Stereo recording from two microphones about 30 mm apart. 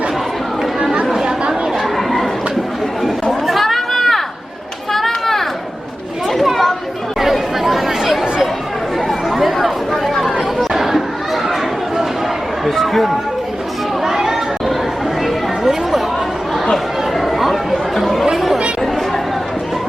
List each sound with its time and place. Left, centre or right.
2.0 s a sound: centre
3.4 s a sound: centre
6.3 s chatter: centre
9.6 s chatter: centre
12.8 s chatter: centre
14.0 s chatter: centre
16.7 s chatter: centre